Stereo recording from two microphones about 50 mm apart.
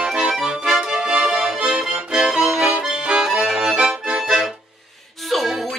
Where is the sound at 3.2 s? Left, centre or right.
Centre.